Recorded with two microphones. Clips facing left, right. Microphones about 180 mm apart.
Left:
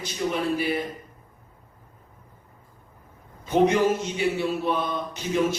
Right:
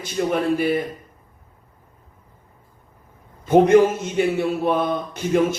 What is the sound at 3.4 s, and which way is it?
A man's voice, 50° right (ahead or behind).